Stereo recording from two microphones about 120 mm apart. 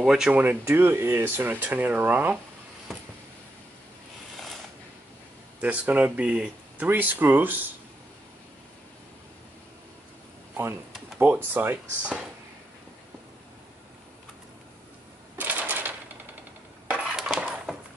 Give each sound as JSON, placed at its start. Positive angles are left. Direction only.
{"t": 0.0, "sound": "speech", "side_deg": -5}
{"t": 0.4, "sound": "speech", "side_deg": -15}
{"t": 5.6, "sound": "speech", "side_deg": -15}
{"t": 10.5, "sound": "a sound", "side_deg": -20}
{"t": 11.1, "sound": "speech", "side_deg": -15}
{"t": 15.3, "sound": "typewriter", "side_deg": -15}
{"t": 16.9, "sound": "a sound", "side_deg": -5}